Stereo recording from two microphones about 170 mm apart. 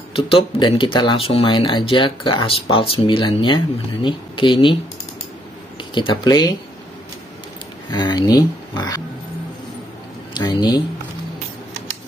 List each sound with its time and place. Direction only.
0.1 s speech: 35° left (ahead or behind)
5.9 s speech: 25° left (ahead or behind)
7.9 s speech: 25° left (ahead or behind)
10.3 s speech: 25° left (ahead or behind)